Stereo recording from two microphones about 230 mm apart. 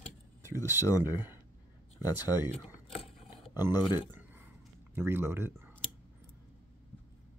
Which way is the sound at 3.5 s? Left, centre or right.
Centre.